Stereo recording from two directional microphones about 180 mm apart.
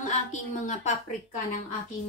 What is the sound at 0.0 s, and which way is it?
Speech, 40° left (ahead or behind).